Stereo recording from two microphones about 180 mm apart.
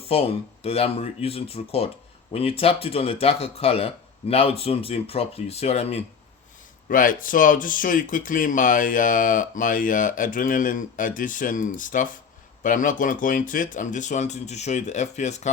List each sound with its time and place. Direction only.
0.1 s speech: 35° left (ahead or behind)
6.8 s speech: 50° left (ahead or behind)